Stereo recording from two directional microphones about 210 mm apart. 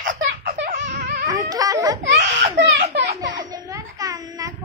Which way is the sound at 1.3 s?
15° right (ahead or behind).